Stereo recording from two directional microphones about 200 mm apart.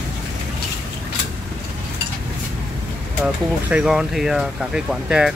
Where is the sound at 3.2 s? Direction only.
5° right (ahead or behind).